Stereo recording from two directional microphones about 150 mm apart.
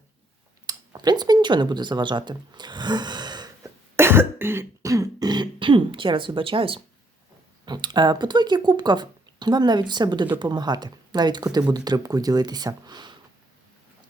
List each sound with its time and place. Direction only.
0.7 s speech: 30° right (ahead or behind)
3.9 s throat clearing: 15° right (ahead or behind); by 6.8 s 35° right (ahead or behind)
7.6 s speech: 30° right (ahead or behind)